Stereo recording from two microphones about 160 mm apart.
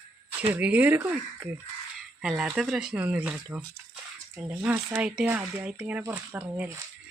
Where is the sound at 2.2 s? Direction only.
5° right (ahead or behind).